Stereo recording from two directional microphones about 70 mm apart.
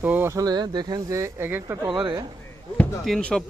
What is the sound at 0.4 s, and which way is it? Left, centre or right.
Speech, right.